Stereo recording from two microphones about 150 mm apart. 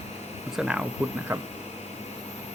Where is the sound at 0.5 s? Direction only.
5° right (ahead or behind).